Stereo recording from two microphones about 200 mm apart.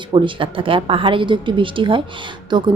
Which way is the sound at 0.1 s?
25° right (ahead or behind).